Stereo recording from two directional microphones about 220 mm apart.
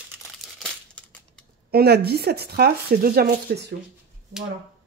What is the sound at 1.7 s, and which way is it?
Speech, 45° right (ahead or behind).